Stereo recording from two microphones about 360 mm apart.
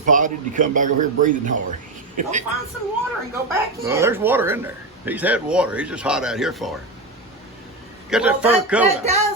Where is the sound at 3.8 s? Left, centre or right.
Centre.